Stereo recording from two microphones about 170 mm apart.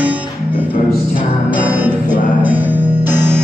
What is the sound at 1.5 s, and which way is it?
Music, 10° right (ahead or behind).